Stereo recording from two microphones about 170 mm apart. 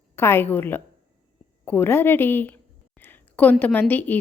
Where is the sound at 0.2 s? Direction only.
15° left (ahead or behind).